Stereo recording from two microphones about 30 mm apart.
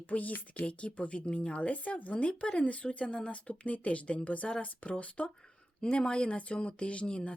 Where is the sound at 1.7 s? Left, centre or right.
Left.